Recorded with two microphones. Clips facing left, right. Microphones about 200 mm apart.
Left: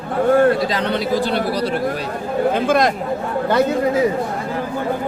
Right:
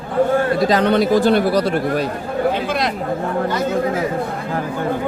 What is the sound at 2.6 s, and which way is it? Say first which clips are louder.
Speech: left 5 dB; 45° left (ahead or behind).